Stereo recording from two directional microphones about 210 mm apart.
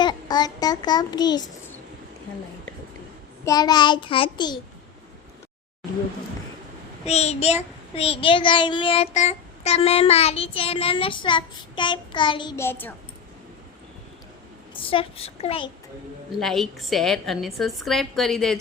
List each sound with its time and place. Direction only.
0.0 s a child's voice: 20° left (ahead or behind)
3.4 s child singing: 20° left (ahead or behind)
7.0 s child singing: 30° left (ahead or behind); by 12.9 s 10° left (ahead or behind)
14.8 s child singing: 25° left (ahead or behind)
16.4 s a woman's voice: centre (ahead or behind)